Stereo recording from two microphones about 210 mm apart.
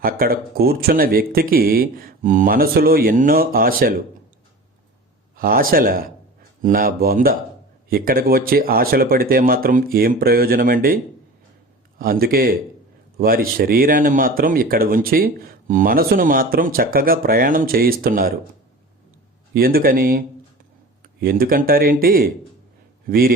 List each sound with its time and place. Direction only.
0.0 s speech: 45° right (ahead or behind)
5.4 s speech: 45° right (ahead or behind)
19.5 s speech: 45° right (ahead or behind)